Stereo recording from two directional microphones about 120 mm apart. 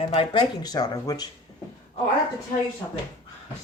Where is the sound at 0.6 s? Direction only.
35° left (ahead or behind).